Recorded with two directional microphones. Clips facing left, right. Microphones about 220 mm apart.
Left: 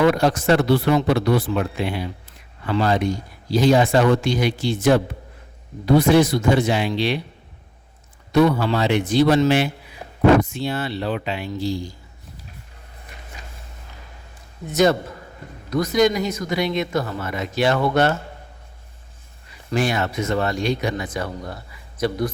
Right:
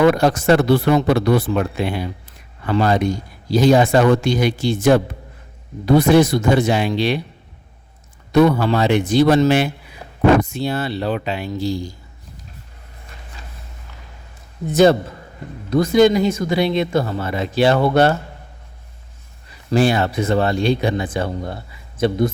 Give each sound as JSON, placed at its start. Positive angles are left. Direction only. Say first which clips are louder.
{"t": 0.0, "sound": "speech", "louder": "right 3 dB", "side_deg": -55}
{"t": 3.8, "sound": "speech", "louder": "right 3 dB", "side_deg": -55}
{"t": 8.3, "sound": "speech", "louder": "right 3 dB", "side_deg": -55}
{"t": 14.7, "sound": "speech", "louder": "right 5 dB", "side_deg": -30}
{"t": 19.7, "sound": "speech", "louder": "right 5 dB", "side_deg": -30}